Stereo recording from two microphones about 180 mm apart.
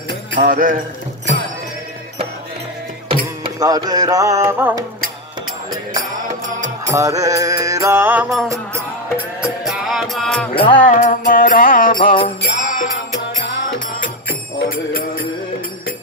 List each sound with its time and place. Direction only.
0.4 s speech: 50° right (ahead or behind)
3.1 s music: 25° right (ahead or behind)
5.9 s music: 45° right (ahead or behind)
6.9 s music: 20° right (ahead or behind); by 10.5 s 5° left (ahead or behind)
10.5 s music: 30° left (ahead or behind)
10.8 s music: 45° left (ahead or behind)
14.9 s music: 55° left (ahead or behind)